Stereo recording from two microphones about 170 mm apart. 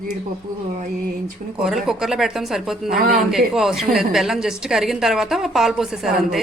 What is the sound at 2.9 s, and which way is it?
Speech, 60° right (ahead or behind).